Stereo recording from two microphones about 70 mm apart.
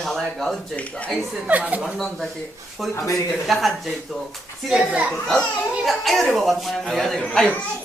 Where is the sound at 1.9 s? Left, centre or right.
Centre.